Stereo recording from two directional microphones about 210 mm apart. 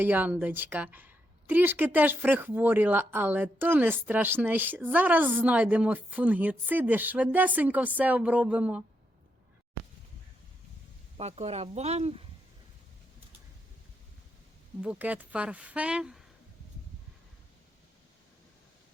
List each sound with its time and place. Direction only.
0.0 s a woman's voice: 10° right (ahead or behind)
11.2 s speech: 30° right (ahead or behind)
14.8 s speech: 5° right (ahead or behind)